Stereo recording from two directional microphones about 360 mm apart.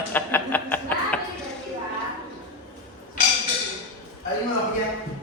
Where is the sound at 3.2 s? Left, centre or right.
Left.